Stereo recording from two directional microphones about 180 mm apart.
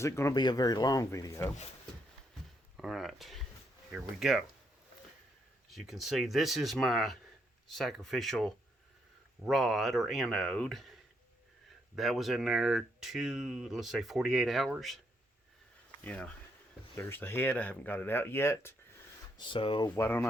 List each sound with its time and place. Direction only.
0.0 s speech: 15° left (ahead or behind)
2.7 s speech: centre (ahead or behind)
5.7 s speech: centre (ahead or behind)
11.9 s speech: centre (ahead or behind)
16.0 s speech: 5° left (ahead or behind)
19.4 s speech: 30° left (ahead or behind)
20.0 s speech: 10° left (ahead or behind)